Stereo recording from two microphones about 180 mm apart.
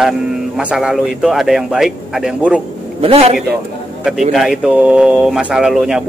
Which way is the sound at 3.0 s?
35° right (ahead or behind).